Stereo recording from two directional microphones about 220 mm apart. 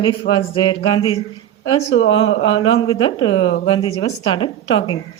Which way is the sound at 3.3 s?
65° left (ahead or behind).